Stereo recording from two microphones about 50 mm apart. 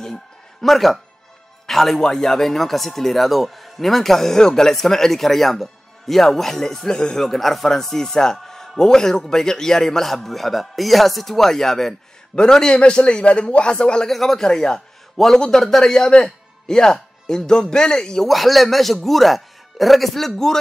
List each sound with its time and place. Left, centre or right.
0.0 s music: centre
1.7 s a man's voice: centre
14.1 s speech: centre
18.3 s speech: centre